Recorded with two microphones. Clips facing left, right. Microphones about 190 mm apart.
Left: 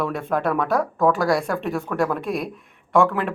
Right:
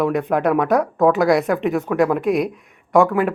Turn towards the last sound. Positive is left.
turn(degrees=-10)  # may be behind; listen again after turning